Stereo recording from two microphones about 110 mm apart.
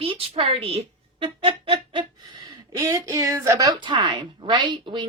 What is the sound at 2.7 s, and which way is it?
A woman's voice, 25° right (ahead or behind).